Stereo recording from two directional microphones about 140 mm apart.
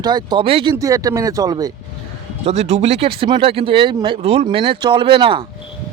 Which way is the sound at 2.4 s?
50° right (ahead or behind).